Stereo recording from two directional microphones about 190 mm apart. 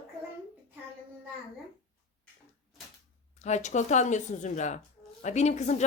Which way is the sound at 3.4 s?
35° left (ahead or behind).